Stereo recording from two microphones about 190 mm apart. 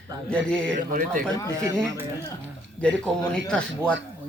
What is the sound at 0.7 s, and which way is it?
Speech, 45° right (ahead or behind).